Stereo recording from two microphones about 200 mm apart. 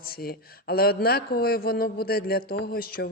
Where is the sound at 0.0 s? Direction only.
50° left (ahead or behind).